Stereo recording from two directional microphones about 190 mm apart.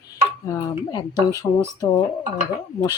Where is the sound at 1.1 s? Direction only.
15° right (ahead or behind).